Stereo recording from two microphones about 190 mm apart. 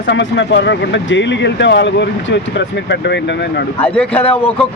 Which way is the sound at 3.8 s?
5° left (ahead or behind).